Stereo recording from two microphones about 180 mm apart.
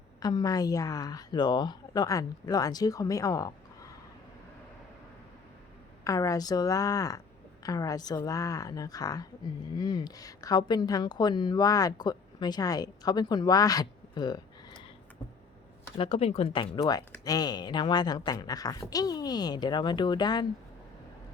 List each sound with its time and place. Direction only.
0.2 s a woman's voice: 20° left (ahead or behind)
6.1 s a woman's voice: 20° left (ahead or behind)
16.0 s a woman's voice: 30° left (ahead or behind)